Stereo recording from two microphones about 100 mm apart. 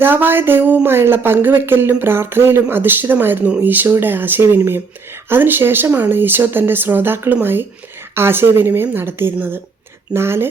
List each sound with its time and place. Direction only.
0.0 s speech: 20° right (ahead or behind)